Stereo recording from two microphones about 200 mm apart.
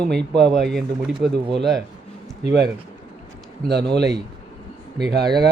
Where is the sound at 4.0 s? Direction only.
55° right (ahead or behind).